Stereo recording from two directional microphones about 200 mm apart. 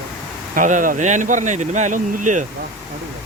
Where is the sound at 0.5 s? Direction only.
40° right (ahead or behind).